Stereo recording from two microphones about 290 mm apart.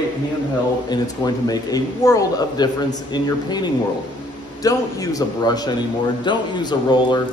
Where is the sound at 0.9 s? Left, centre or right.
Centre.